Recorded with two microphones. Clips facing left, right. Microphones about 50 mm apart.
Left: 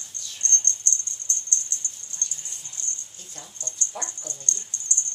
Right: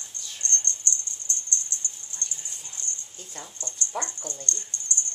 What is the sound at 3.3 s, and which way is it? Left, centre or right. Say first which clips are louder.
Speech: right 2 dB; right.